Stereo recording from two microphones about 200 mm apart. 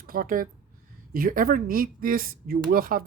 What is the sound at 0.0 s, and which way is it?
Speech, 45° right (ahead or behind).